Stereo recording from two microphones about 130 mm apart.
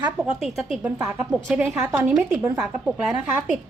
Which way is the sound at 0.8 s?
10° right (ahead or behind).